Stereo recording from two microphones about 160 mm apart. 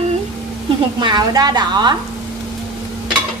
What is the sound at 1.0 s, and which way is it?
Speech, 25° right (ahead or behind).